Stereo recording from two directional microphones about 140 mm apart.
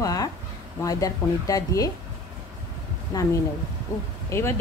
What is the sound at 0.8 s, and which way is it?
Speech, 25° left (ahead or behind).